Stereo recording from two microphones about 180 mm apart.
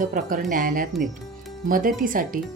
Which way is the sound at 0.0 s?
50° right (ahead or behind).